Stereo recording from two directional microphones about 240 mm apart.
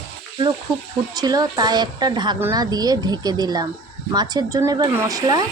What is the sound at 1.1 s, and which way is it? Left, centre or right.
A woman's voice, centre.